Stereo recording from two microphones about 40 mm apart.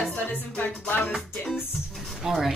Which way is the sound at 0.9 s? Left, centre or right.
Left.